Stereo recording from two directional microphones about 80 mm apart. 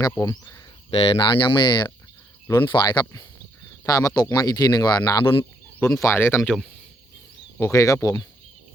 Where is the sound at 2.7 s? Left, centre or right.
Left.